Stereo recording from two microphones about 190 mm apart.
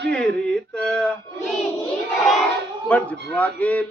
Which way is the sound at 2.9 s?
10° left (ahead or behind).